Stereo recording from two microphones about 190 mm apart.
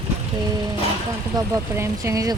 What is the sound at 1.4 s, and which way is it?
Speech, 15° right (ahead or behind).